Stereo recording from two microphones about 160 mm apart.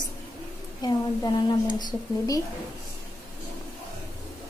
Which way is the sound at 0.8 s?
25° left (ahead or behind).